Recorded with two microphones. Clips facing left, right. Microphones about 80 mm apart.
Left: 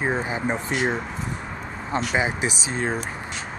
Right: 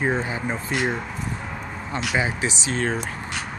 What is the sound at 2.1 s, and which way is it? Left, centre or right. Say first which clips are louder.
Speech: right 2 dB; centre.